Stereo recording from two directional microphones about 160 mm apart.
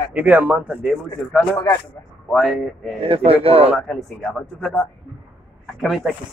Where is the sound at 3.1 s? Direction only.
35° right (ahead or behind).